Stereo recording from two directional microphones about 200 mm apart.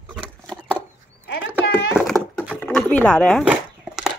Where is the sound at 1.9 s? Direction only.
Centre (ahead or behind).